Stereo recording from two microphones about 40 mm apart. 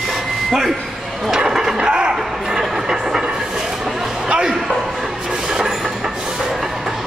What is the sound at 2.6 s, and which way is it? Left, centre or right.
Train, centre.